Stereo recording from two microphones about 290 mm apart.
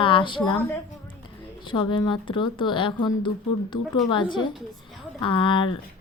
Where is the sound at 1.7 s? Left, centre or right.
Centre.